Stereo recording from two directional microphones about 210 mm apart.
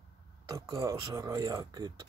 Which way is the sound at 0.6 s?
15° right (ahead or behind).